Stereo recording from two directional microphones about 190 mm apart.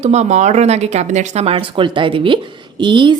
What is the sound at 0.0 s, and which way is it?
A woman's voice, 35° right (ahead or behind).